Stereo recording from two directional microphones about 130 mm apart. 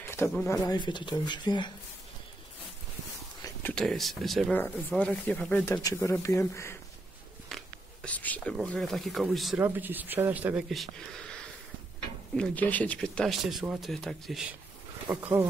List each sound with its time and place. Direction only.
0.5 s speech: 30° left (ahead or behind)
3.7 s speech: 5° left (ahead or behind)
4.6 s speech: 15° left (ahead or behind)
5.9 s speech: 25° left (ahead or behind)
7.4 s a sound: 5° left (ahead or behind)
8.6 s speech: centre (ahead or behind)
9.6 s speech: 15° right (ahead or behind)
10.7 s speech: 5° left (ahead or behind)
12.4 s speech: 10° left (ahead or behind)
15.1 s speech: 20° right (ahead or behind)